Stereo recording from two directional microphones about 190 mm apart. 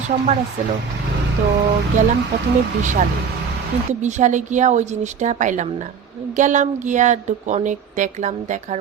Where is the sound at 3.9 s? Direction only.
40° right (ahead or behind).